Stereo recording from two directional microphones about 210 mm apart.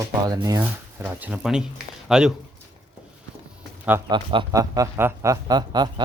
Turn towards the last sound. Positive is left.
turn(degrees=-20)  # may be behind; listen again after turning